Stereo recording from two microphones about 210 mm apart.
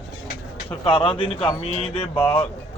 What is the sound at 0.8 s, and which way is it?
Speech, 25° left (ahead or behind).